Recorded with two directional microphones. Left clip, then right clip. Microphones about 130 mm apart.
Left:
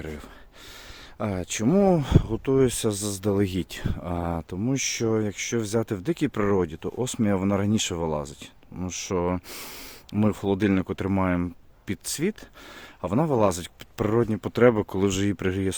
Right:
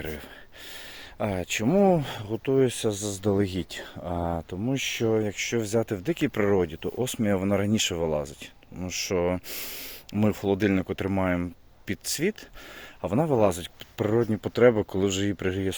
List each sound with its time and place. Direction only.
1.2 s speech: 35° left (ahead or behind)
10.6 s speech: 40° left (ahead or behind)